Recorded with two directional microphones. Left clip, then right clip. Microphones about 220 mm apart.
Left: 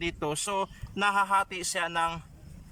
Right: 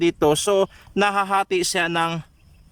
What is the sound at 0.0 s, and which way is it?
Speech, 55° right (ahead or behind).